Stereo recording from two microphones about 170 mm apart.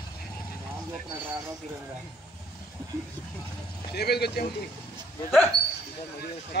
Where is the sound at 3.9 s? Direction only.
70° left (ahead or behind).